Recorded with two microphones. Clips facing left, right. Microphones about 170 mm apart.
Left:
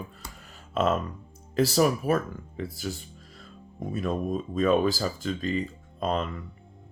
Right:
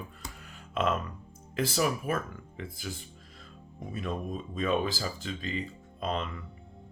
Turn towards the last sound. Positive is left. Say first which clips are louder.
# left 5 dB
turn(degrees=45)  # may be behind; listen again after turning